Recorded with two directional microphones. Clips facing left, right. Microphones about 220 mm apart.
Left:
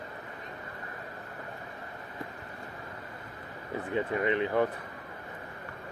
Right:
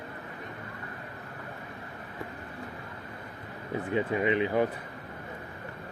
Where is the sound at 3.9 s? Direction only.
15° right (ahead or behind).